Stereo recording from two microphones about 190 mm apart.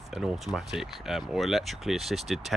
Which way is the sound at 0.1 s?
5° right (ahead or behind).